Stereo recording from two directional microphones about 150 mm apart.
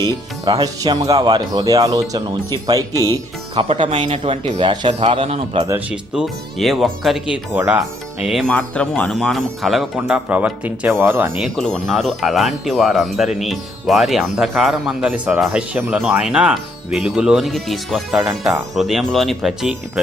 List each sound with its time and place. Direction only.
0.0 s speech: 25° right (ahead or behind)
3.6 s speech: 35° right (ahead or behind)
5.9 s speech: centre (ahead or behind)
7.5 s speech: 15° right (ahead or behind)
8.3 s speech: 5° left (ahead or behind); by 11.3 s 15° right (ahead or behind)
11.3 s speech: centre (ahead or behind)